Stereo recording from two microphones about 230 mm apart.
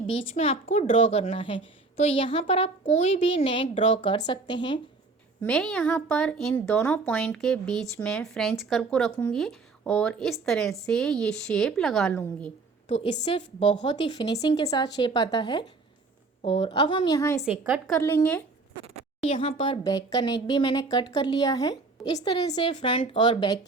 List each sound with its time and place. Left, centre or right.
0.3 s a woman's voice: left
5.4 s a woman's voice: centre
13.2 s a woman's voice: left
17.7 s a woman's voice: centre
19.2 s a woman's voice: left